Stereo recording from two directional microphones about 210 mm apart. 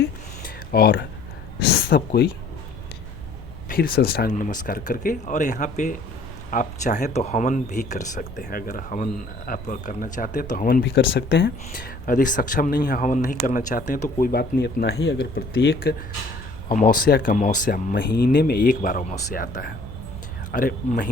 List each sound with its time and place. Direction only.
0.4 s a sound: 45° left (ahead or behind)
1.6 s speech: 50° left (ahead or behind)
3.7 s speech: 45° left (ahead or behind)
10.8 s speech: 55° left (ahead or behind); by 17.9 s 40° left (ahead or behind)
17.9 s speech: 50° left (ahead or behind)